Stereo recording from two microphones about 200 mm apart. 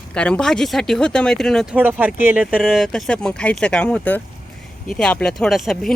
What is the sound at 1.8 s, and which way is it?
Speech, 10° right (ahead or behind).